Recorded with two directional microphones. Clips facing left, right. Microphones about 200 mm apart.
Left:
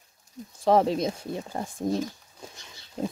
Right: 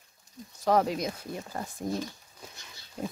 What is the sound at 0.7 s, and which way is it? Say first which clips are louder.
Speech: left 4 dB; 25° left (ahead or behind).